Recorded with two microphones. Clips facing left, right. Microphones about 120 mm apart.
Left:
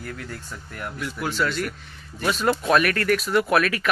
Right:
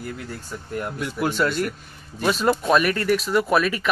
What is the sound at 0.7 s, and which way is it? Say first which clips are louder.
Speech: right 4 dB; 25° right (ahead or behind).